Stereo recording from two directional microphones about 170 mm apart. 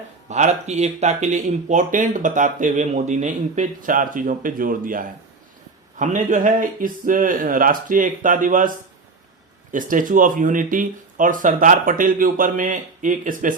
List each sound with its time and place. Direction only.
0.3 s speech: 45° right (ahead or behind)
9.7 s speech: 50° right (ahead or behind)